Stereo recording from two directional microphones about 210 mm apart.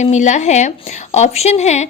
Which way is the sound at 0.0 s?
35° left (ahead or behind).